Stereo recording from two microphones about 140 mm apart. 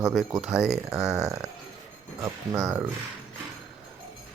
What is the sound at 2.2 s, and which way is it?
Speech, 25° right (ahead or behind).